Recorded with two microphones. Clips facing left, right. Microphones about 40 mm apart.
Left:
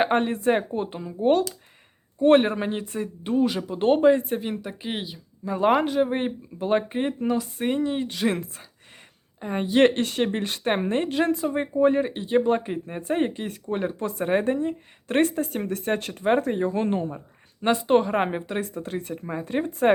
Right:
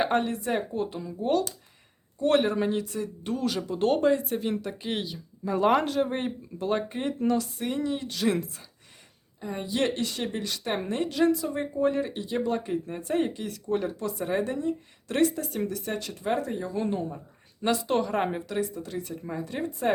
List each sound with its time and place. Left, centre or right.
0.0 s speech: left
4.4 s speech: centre
7.9 s speech: left
9.4 s speech: left